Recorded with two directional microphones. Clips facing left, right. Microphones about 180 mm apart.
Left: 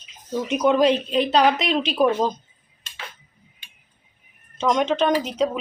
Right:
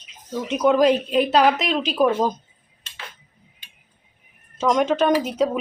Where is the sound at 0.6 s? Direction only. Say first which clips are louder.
Right 2 dB; 5° right (ahead or behind).